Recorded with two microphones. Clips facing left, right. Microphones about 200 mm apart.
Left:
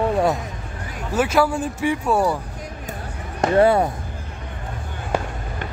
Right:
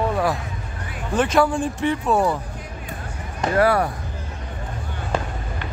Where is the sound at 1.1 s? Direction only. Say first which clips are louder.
Even; 5° left (ahead or behind).